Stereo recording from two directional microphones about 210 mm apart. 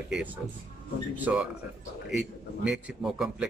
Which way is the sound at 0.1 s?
5° right (ahead or behind).